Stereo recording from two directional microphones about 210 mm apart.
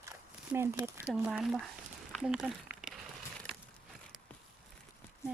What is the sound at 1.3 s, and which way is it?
Speech, centre (ahead or behind).